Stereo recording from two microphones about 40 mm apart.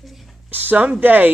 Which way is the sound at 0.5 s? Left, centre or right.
Right.